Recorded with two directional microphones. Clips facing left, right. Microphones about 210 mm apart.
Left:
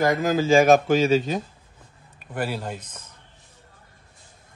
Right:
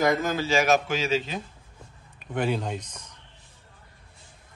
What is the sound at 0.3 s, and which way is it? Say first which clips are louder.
Speech: left 7 dB; 45° left (ahead or behind).